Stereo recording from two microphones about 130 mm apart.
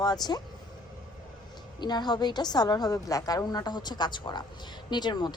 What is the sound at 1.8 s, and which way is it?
A woman's voice, 35° left (ahead or behind).